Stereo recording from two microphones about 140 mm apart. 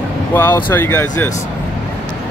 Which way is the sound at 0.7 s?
15° left (ahead or behind).